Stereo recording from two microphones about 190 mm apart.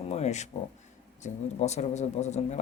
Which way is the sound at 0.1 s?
35° left (ahead or behind).